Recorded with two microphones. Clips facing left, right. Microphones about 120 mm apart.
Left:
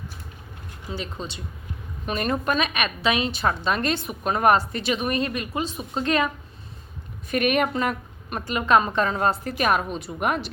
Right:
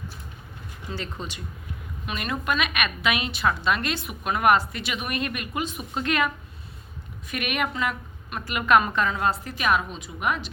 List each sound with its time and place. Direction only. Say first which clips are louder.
0.9 s speech: left 2 dB; 20° left (ahead or behind)
2.0 s a woman's voice: left 4 dB; 40° left (ahead or behind)